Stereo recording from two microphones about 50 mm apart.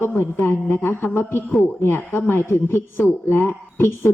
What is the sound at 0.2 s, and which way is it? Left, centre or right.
Speech, left.